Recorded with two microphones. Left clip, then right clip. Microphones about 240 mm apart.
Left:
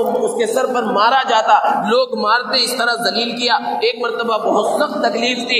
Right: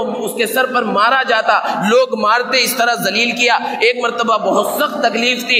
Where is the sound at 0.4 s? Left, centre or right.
Right.